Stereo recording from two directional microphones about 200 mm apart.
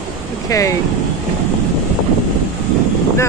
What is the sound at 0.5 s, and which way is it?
Speech, 15° left (ahead or behind).